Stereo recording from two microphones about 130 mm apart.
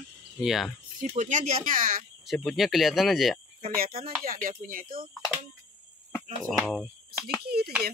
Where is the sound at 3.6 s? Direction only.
90° right.